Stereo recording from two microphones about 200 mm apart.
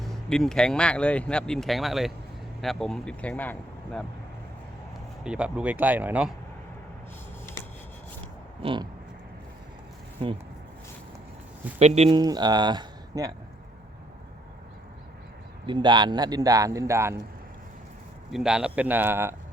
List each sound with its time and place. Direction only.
0.0 s speech: centre (ahead or behind)
5.2 s speech: 5° right (ahead or behind)
8.6 s speech: 25° right (ahead or behind)
11.8 s speech: 35° right (ahead or behind)
15.6 s speech: 25° right (ahead or behind)
18.3 s speech: centre (ahead or behind)